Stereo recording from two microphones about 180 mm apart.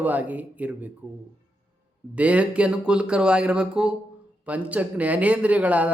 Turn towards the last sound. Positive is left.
turn(degrees=-10)  # may be behind; listen again after turning